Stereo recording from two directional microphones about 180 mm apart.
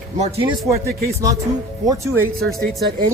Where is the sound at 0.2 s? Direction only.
35° right (ahead or behind).